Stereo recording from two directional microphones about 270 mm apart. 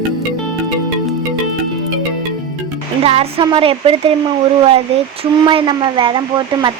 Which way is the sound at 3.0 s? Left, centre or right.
Right.